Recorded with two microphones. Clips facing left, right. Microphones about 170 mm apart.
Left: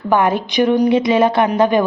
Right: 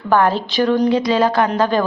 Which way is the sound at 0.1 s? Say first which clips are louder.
Even; 20° left (ahead or behind).